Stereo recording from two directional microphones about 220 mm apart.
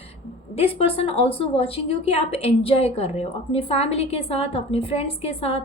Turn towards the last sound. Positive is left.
turn(degrees=25)  # may be behind; listen again after turning